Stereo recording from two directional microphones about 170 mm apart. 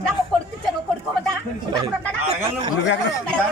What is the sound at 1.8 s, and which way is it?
Speech, 30° right (ahead or behind).